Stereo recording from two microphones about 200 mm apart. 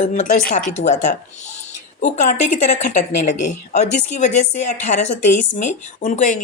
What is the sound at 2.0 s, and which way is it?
Speech, 35° left (ahead or behind).